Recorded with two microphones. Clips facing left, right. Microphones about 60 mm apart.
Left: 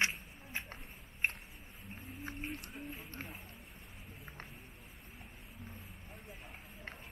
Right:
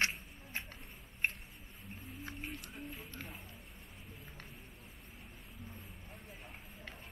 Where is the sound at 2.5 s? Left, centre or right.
Centre.